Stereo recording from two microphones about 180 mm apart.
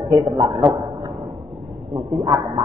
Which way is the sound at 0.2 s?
20° right (ahead or behind).